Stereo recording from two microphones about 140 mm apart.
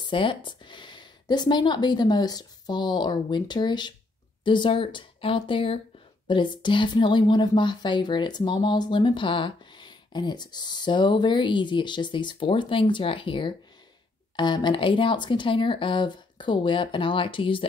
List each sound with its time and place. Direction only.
0.0 s a woman's voice: 35° left (ahead or behind)